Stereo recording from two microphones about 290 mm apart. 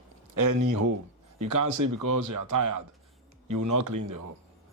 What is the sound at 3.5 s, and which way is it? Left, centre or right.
Speech, right.